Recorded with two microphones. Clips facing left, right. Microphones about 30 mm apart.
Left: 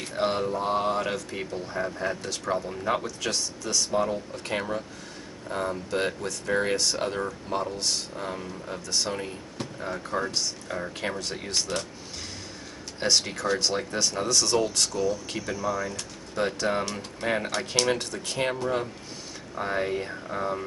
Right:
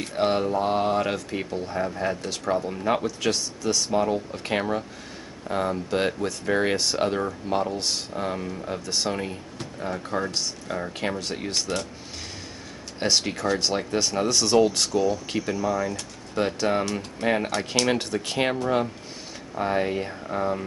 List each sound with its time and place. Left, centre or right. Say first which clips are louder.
0.0 s speech: right 3 dB; centre
4.1 s speech: right 4 dB; right
9.6 s a sound: right 1 dB; centre
10.1 s speech: even; centre
13.0 s speech: right 1 dB; centre
17.9 s speech: right 5 dB; centre
19.5 s speech: right 3 dB; centre